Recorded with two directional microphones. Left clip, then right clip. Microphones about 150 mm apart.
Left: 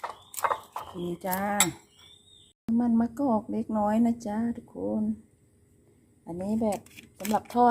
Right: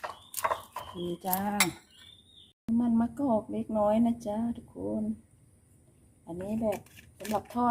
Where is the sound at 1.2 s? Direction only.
40° left (ahead or behind).